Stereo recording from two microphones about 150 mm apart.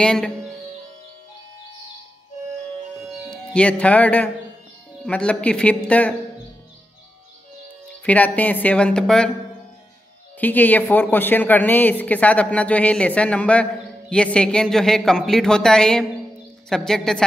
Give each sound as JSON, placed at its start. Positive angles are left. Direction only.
{"t": 0.0, "sound": "speech", "side_deg": 5}
{"t": 3.5, "sound": "a woman's voice", "side_deg": 10}
{"t": 8.0, "sound": "a woman's voice", "side_deg": 10}
{"t": 10.4, "sound": "a woman's voice", "side_deg": 10}